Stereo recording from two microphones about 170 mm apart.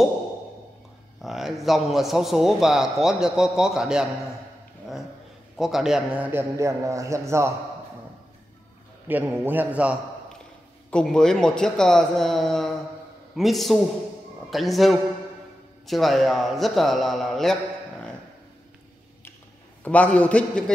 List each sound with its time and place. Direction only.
1.2 s a man's voice: centre (ahead or behind)
5.6 s a man's voice: centre (ahead or behind)
6.5 s a man's voice: 20° right (ahead or behind)
9.0 s a man's voice: 10° right (ahead or behind)
10.9 s a man's voice: 5° left (ahead or behind)
19.8 s a man's voice: 10° left (ahead or behind)